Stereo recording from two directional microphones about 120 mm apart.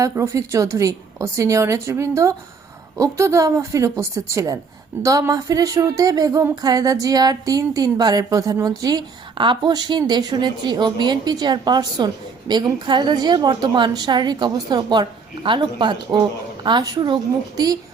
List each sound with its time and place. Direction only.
0.0 s a woman's voice: 25° right (ahead or behind)